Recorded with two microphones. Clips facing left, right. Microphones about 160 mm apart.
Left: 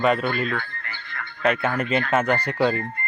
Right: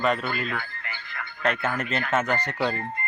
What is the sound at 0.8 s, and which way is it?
Music, 15° right (ahead or behind).